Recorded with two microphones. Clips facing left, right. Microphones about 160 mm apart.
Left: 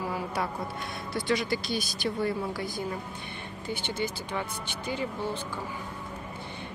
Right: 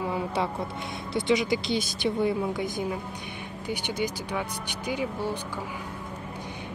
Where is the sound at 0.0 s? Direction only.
25° right (ahead or behind).